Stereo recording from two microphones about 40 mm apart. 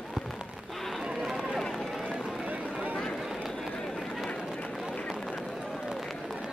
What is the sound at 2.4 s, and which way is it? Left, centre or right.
Run, right.